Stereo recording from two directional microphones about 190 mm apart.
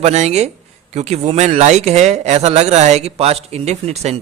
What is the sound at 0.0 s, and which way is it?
A man's voice, 35° right (ahead or behind).